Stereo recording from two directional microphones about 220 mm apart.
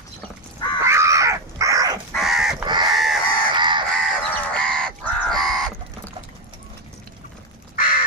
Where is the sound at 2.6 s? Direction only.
20° right (ahead or behind).